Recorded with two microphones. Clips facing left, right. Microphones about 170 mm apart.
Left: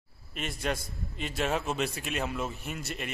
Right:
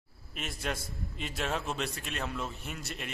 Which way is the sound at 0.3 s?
Centre (ahead or behind).